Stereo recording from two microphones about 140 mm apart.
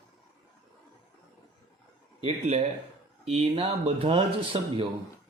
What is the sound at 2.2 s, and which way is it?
Speech, 50° right (ahead or behind).